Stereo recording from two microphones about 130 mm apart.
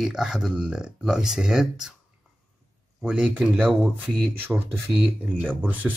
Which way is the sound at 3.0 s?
5° right (ahead or behind).